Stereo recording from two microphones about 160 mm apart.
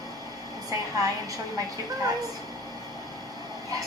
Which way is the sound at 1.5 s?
20° right (ahead or behind).